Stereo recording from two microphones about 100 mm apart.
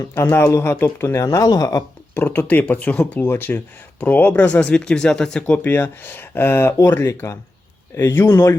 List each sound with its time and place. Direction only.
0.1 s speech: 20° left (ahead or behind)
2.1 s speech: 20° left (ahead or behind)